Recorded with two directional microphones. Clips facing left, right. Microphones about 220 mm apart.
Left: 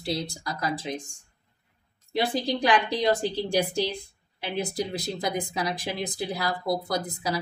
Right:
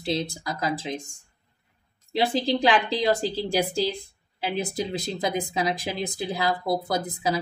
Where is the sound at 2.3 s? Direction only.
25° right (ahead or behind).